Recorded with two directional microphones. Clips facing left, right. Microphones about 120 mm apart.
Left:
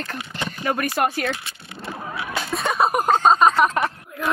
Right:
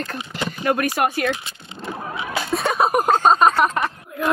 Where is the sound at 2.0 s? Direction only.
15° right (ahead or behind).